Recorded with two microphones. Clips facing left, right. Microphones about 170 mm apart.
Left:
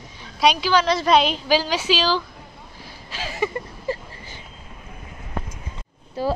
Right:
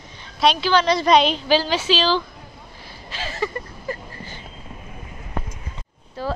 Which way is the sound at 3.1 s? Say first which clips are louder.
Even; 10° left (ahead or behind).